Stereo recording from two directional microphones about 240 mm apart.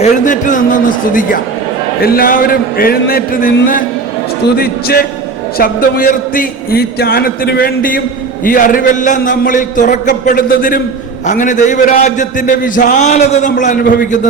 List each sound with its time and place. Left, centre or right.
0.0 s a man's voice: left